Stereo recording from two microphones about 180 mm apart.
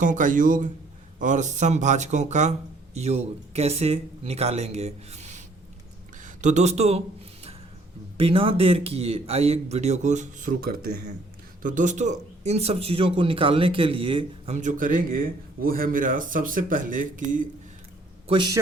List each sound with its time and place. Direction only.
0.0 s speech: 45° right (ahead or behind)
8.2 s speech: 30° right (ahead or behind)
18.3 s a man's voice: 25° right (ahead or behind)